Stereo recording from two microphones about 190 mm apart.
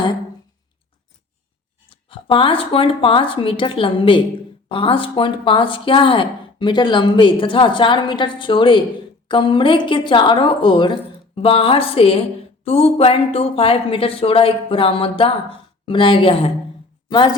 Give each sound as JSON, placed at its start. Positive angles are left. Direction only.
{"t": 1.9, "sound": "a woman's voice", "side_deg": 30}